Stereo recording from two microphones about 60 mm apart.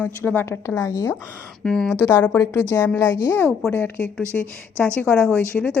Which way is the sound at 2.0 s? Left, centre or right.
Left.